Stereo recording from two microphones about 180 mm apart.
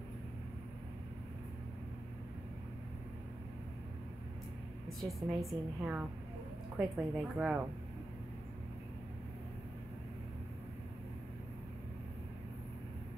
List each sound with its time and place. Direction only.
5.0 s a woman's voice: 15° right (ahead or behind)
6.8 s a woman's voice: 5° right (ahead or behind)